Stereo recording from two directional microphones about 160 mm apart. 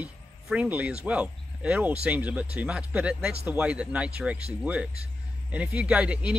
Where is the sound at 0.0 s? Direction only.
10° right (ahead or behind).